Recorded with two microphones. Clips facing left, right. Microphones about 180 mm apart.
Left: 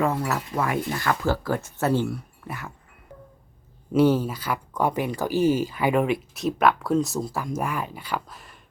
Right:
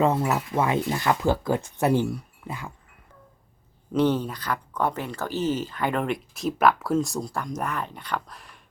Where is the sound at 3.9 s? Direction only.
10° left (ahead or behind).